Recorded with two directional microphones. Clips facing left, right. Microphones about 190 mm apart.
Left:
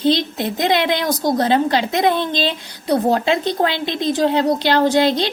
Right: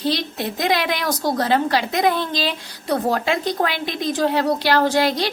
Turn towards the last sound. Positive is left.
turn(degrees=20)  # may be behind; listen again after turning